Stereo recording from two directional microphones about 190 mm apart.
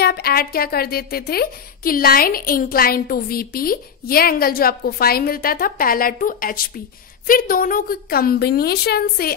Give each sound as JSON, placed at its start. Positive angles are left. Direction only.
{"t": 0.0, "sound": "a woman's voice", "side_deg": 55}